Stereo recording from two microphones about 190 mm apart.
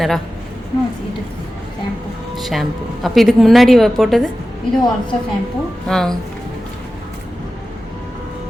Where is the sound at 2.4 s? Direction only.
Centre (ahead or behind).